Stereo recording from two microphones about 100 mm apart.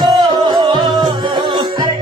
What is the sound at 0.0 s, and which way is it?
Music, 50° right (ahead or behind).